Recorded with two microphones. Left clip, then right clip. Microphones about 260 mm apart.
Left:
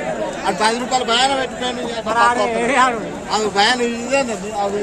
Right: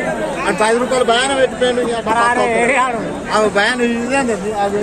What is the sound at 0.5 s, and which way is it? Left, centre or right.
Speech, left.